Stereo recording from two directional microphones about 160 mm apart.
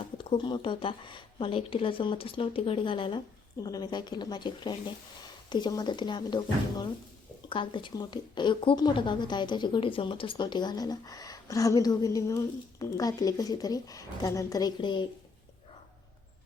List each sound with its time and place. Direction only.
0.0 s speech: 35° left (ahead or behind)